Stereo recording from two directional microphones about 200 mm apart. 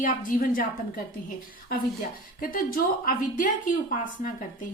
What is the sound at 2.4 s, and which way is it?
A woman's voice, 45° left (ahead or behind).